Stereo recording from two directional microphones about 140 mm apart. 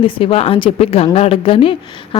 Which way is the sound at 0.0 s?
40° left (ahead or behind).